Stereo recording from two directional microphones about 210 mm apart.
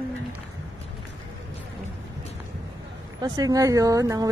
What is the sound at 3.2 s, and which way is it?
Speech, 15° right (ahead or behind).